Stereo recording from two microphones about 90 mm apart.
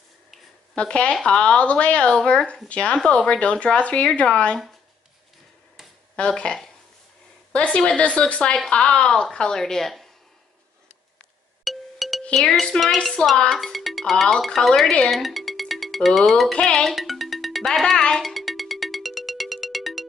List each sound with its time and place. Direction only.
0.7 s speech: 10° left (ahead or behind)
6.1 s speech: 10° left (ahead or behind)
11.6 s music: centre (ahead or behind)
12.4 s speech: 5° left (ahead or behind)
16.5 s music: 5° left (ahead or behind)